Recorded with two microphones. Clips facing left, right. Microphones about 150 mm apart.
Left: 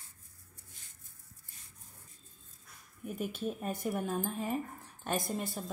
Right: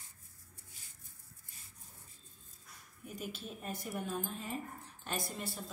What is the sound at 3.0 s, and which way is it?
A woman's voice, 50° left (ahead or behind).